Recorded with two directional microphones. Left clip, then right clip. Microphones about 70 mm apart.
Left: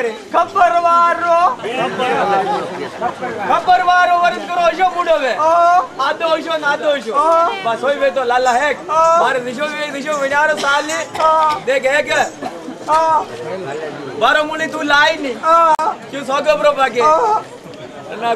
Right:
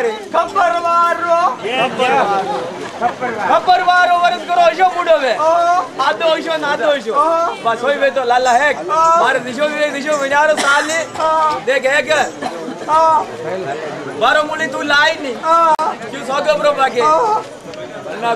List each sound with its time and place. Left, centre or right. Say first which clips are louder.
0.3 s a man's voice: left 3 dB; centre
1.8 s a man's voice: right 5 dB; right
3.4 s a man's voice: even; centre
5.4 s a man's voice: left 1 dB; centre
5.9 s a man's voice: right 2 dB; centre
7.2 s a man's voice: left 3 dB; centre
7.6 s a man's voice: right 1 dB; centre
11.1 s speech: left 2 dB; left
11.6 s a man's voice: right 1 dB; centre
14.2 s a man's voice: even; centre